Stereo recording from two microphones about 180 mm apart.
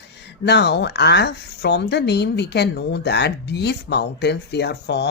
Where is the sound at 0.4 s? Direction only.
70° left (ahead or behind).